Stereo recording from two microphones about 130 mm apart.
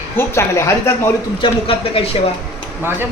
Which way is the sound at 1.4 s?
45° left (ahead or behind).